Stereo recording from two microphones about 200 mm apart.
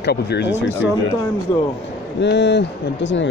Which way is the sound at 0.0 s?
55° left (ahead or behind).